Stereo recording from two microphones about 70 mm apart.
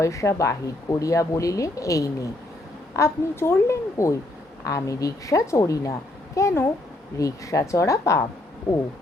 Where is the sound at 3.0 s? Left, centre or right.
Left.